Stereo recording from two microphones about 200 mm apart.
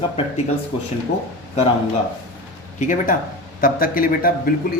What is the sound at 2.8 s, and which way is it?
Speech, 40° left (ahead or behind).